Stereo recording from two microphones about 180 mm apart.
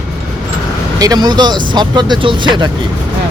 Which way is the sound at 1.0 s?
20° right (ahead or behind).